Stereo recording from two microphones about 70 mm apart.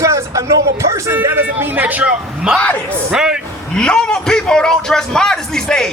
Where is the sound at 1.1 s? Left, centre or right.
Right; by 3.4 s centre.